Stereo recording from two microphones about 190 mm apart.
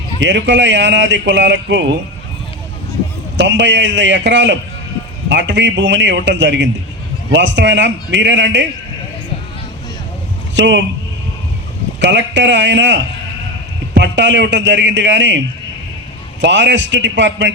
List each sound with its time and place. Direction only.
0.2 s speech: 70° right (ahead or behind)
3.3 s speech: 70° right (ahead or behind)
10.5 s speech: 70° right (ahead or behind)
11.9 s speech: 65° right (ahead or behind)
16.4 s speech: 70° right (ahead or behind)